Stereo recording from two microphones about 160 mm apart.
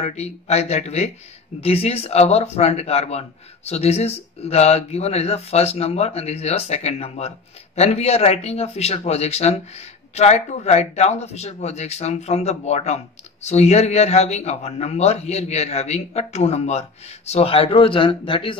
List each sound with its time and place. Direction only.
0.0 s speech: 45° left (ahead or behind)